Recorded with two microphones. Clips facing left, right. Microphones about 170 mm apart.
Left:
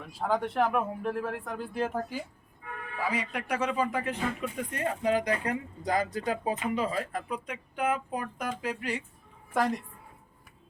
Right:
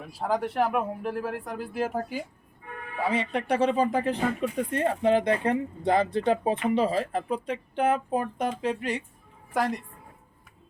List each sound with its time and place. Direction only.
0.1 s speech: centre (ahead or behind)
3.0 s speech: 25° right (ahead or behind)